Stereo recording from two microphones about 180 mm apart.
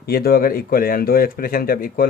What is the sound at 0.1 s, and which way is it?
Speech, 55° left (ahead or behind).